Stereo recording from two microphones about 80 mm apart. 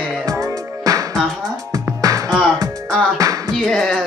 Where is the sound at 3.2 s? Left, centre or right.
Right.